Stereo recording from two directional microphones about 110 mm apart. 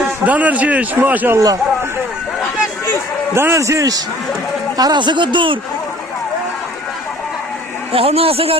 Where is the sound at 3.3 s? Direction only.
25° right (ahead or behind); by 5.6 s 50° right (ahead or behind).